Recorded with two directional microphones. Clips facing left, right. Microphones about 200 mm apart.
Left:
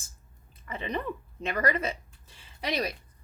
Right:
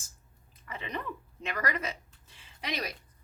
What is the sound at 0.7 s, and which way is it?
Speech, 30° left (ahead or behind).